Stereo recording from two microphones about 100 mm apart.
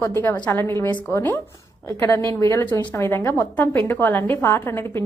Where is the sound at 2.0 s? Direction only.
30° left (ahead or behind).